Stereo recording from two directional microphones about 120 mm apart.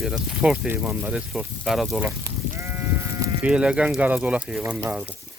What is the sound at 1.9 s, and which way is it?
Sheep, 20° right (ahead or behind).